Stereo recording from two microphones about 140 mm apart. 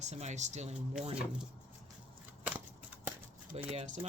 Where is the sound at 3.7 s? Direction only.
60° right (ahead or behind).